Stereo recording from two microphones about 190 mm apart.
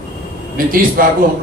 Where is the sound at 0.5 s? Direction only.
50° right (ahead or behind).